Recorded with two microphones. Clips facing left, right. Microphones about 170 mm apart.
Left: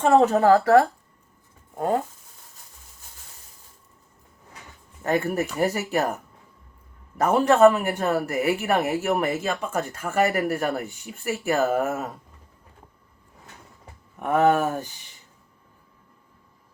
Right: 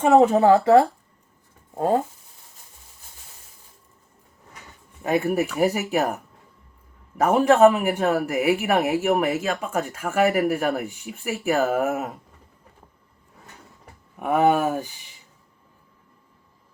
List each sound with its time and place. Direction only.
0.2 s speech: 10° right (ahead or behind)
0.4 s speech: 20° right (ahead or behind)
5.0 s speech: 15° right (ahead or behind)
7.3 s speech: 15° right (ahead or behind)
9.0 s speech: 15° right (ahead or behind)
11.0 s speech: centre (ahead or behind)
11.9 s speech: 15° right (ahead or behind)
14.2 s speech: 10° right (ahead or behind)